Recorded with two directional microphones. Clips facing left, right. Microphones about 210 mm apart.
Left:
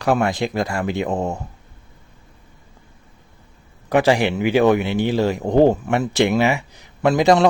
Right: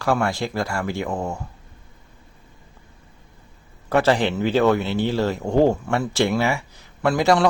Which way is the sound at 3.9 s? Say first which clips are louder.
Left 2 dB; 15° left (ahead or behind).